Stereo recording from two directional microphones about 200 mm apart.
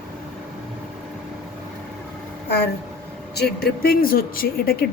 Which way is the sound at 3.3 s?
50° left (ahead or behind).